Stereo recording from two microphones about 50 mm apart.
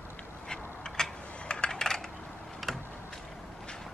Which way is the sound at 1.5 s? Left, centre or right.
Centre.